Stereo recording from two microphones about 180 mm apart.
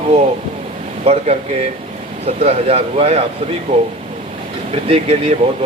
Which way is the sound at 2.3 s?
35° right (ahead or behind).